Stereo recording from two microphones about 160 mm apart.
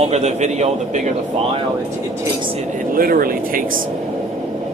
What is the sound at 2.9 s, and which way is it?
Speech, 65° right (ahead or behind).